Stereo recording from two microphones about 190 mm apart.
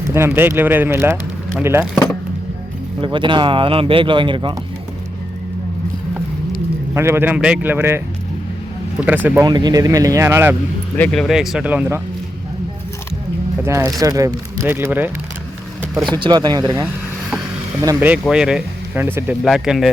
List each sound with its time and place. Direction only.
0.1 s speech: 15° right (ahead or behind)
3.0 s speech: 25° right (ahead or behind)
6.9 s speech: 15° right (ahead or behind)
9.0 s speech: 10° right (ahead or behind)
9.5 s speech: 20° right (ahead or behind)
10.9 s speech: 5° left (ahead or behind)
13.6 s speech: 15° right (ahead or behind)
16.2 s speech: 20° right (ahead or behind)
18.1 s speech: 5° right (ahead or behind)